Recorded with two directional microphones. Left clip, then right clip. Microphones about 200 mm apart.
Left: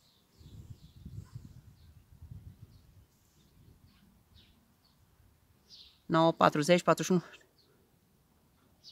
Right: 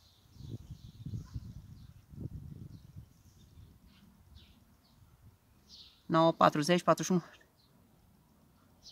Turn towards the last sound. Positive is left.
turn(degrees=25)  # may be behind; listen again after turning